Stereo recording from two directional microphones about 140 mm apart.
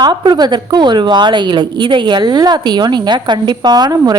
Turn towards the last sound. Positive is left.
turn(degrees=-30)  # may be behind; listen again after turning